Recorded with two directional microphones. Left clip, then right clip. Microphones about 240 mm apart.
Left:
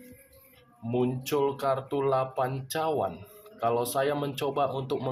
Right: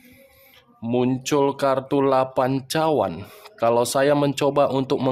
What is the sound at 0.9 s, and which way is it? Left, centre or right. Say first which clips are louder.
Speech: right 7 dB; right.